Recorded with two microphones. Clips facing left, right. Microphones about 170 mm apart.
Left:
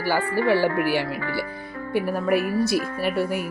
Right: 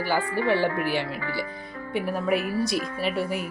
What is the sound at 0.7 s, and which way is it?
Speech, 65° left (ahead or behind).